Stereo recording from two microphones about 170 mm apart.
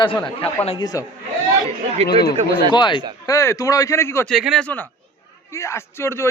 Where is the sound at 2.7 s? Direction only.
25° left (ahead or behind).